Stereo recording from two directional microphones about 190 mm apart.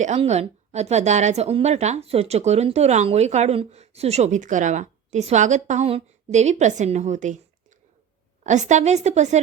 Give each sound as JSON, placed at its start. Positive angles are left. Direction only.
{"t": 0.0, "sound": "a woman's voice", "side_deg": -35}
{"t": 8.4, "sound": "a woman's voice", "side_deg": -40}